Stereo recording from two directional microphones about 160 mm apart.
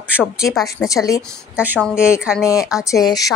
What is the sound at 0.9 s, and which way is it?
Speech, 20° left (ahead or behind).